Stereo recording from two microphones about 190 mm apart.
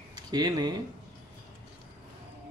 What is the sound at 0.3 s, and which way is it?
Speech, 20° right (ahead or behind).